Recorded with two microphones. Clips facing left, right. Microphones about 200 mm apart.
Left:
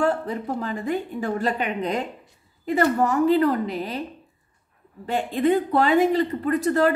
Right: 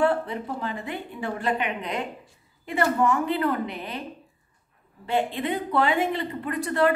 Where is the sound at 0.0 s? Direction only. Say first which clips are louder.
Even; 40° left (ahead or behind).